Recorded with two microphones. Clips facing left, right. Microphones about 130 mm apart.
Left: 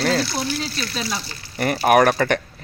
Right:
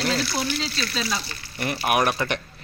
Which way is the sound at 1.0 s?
10° left (ahead or behind).